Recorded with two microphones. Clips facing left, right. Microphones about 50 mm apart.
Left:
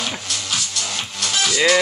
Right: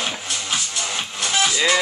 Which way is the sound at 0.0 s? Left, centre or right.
Centre.